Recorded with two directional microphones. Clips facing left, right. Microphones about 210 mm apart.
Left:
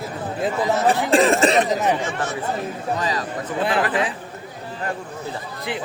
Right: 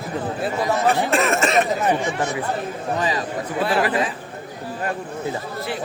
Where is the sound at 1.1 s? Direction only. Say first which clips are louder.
Left 4 dB; 35° left (ahead or behind).